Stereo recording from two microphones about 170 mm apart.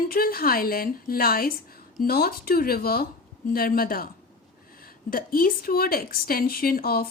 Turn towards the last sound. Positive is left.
turn(degrees=60)  # may be behind; listen again after turning